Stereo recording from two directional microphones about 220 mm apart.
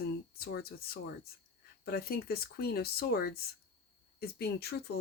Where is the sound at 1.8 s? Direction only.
45° left (ahead or behind).